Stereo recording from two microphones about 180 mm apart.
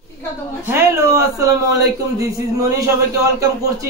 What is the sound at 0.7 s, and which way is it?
A man's voice, 15° right (ahead or behind).